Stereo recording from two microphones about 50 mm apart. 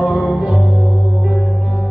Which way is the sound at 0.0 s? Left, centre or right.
Right.